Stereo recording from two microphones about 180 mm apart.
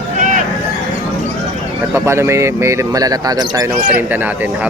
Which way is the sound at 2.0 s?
15° right (ahead or behind).